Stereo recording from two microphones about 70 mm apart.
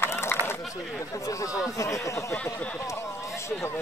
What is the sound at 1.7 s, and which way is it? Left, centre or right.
Speech, left.